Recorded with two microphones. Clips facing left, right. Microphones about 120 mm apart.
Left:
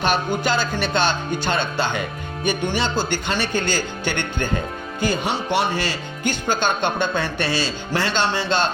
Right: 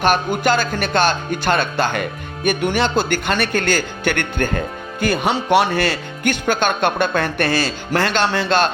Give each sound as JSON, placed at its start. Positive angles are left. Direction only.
{"t": 0.4, "sound": "speech", "side_deg": -55}